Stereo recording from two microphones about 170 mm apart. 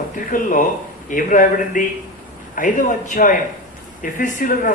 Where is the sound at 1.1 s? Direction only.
50° left (ahead or behind).